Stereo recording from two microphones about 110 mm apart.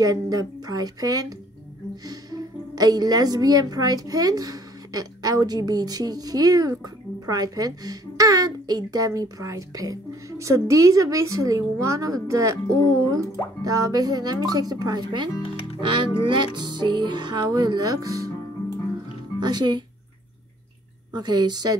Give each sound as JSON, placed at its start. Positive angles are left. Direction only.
{"t": 0.0, "sound": "a woman's voice", "side_deg": -35}
{"t": 2.7, "sound": "a woman's voice", "side_deg": -35}
{"t": 19.4, "sound": "a woman's voice", "side_deg": -40}
{"t": 21.1, "sound": "a woman's voice", "side_deg": -40}